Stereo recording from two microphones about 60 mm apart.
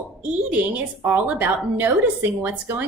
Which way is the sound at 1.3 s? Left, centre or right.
Right.